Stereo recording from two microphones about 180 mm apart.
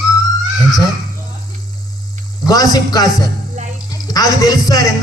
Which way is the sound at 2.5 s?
20° left (ahead or behind).